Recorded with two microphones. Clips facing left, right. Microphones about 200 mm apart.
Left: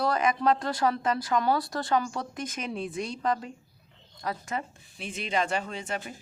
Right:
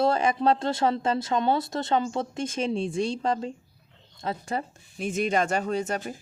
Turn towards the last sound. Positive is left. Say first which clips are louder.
# right 7 dB
turn(degrees=-45)  # may be behind; listen again after turning